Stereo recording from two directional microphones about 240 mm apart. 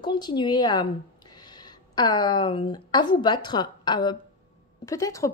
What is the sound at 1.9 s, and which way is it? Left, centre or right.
A woman's voice, centre.